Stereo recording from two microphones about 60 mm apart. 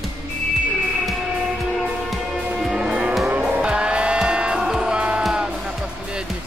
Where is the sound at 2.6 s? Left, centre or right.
Centre.